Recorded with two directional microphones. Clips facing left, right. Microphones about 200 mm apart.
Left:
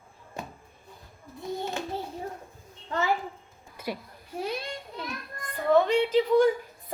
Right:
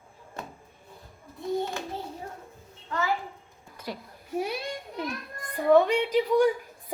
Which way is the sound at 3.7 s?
10° left (ahead or behind).